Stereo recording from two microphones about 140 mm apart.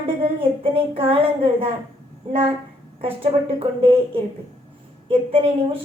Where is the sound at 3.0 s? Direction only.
45° right (ahead or behind).